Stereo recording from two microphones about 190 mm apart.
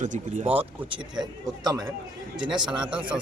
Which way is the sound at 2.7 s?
5° right (ahead or behind).